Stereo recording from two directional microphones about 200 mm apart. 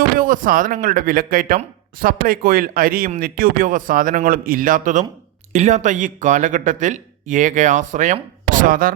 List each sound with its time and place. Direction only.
0.2 s speech: 40° right (ahead or behind)